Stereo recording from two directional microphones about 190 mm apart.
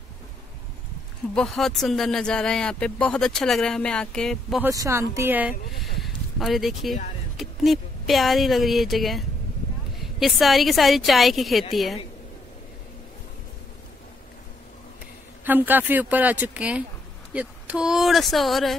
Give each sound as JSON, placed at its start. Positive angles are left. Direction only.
{"t": 1.3, "sound": "speech", "side_deg": 0}
{"t": 4.6, "sound": "speech", "side_deg": -15}
{"t": 5.9, "sound": "a sound", "side_deg": 0}
{"t": 7.3, "sound": "a woman's voice", "side_deg": 0}
{"t": 15.4, "sound": "speech", "side_deg": -10}